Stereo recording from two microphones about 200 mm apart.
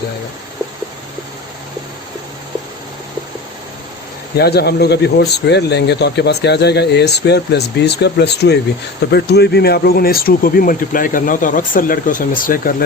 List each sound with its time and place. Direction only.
4.4 s speech: 55° left (ahead or behind)